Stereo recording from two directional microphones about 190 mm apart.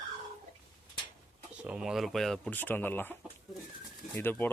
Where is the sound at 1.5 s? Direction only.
5° right (ahead or behind).